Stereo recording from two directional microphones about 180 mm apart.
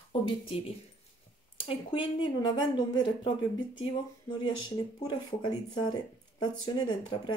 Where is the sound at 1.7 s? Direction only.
25° left (ahead or behind).